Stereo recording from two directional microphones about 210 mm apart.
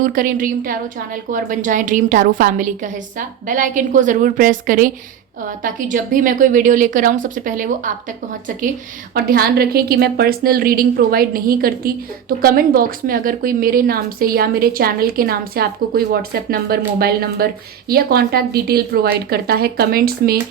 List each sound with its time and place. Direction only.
0.0 s a woman's voice: 40° right (ahead or behind)
9.1 s a woman's voice: 45° right (ahead or behind)